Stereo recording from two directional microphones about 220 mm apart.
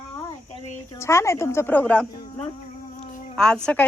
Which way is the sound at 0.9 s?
10° left (ahead or behind).